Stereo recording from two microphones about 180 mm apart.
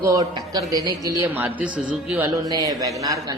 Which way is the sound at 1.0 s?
10° right (ahead or behind).